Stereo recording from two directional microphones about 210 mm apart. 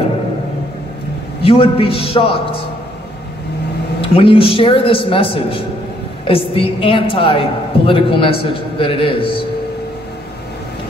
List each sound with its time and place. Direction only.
1.4 s a woman's voice: 25° left (ahead or behind)
4.0 s a woman's voice: 25° left (ahead or behind)